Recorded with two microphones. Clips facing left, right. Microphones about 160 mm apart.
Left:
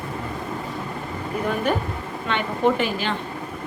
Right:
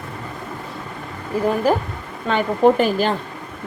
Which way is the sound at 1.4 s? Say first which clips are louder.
Right 5 dB; 35° right (ahead or behind).